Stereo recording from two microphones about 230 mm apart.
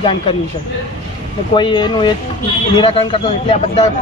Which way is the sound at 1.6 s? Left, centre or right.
Centre.